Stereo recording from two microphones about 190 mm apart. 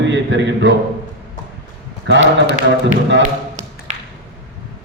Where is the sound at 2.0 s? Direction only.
70° right (ahead or behind).